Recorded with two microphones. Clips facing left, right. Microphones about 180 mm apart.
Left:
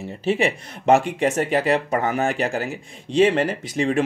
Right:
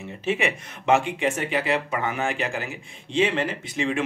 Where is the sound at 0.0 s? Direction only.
35° left (ahead or behind).